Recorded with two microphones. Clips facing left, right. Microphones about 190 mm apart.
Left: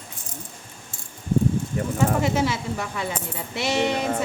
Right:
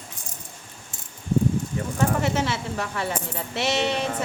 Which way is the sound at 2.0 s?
10° left (ahead or behind).